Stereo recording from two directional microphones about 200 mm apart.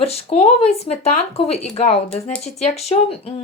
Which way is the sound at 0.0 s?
30° left (ahead or behind).